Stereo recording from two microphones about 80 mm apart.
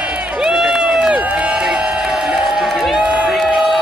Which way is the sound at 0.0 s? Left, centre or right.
Centre.